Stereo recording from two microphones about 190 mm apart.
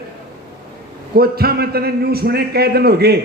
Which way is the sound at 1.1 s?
55° right (ahead or behind).